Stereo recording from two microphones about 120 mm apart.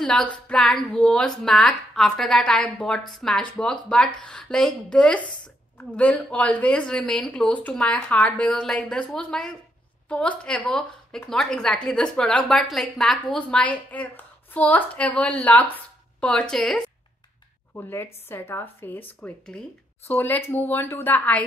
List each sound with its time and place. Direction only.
0.0 s a woman's voice: 5° left (ahead or behind)
17.7 s speech: 20° left (ahead or behind)